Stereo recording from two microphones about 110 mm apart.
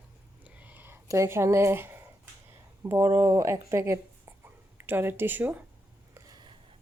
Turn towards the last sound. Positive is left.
turn(degrees=-15)  # may be behind; listen again after turning